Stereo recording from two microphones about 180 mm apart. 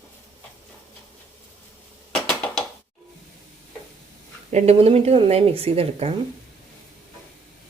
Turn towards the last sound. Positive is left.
turn(degrees=-35)  # may be behind; listen again after turning